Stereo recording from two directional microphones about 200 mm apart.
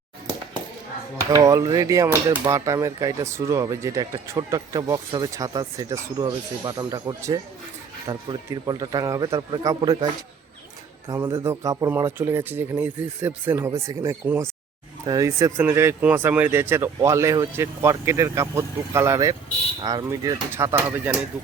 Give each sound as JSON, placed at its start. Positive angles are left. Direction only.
{"t": 1.3, "sound": "speech", "side_deg": -15}
{"t": 11.1, "sound": "speech", "side_deg": -15}